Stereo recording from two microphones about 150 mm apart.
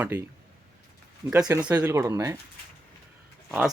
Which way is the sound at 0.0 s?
15° right (ahead or behind).